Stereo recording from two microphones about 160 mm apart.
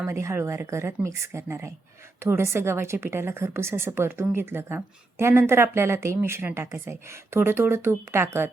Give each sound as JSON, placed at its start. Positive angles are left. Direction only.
{"t": 0.0, "sound": "a woman's voice", "side_deg": -15}